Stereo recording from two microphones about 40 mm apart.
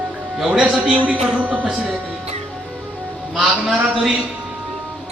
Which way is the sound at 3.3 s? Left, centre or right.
Centre.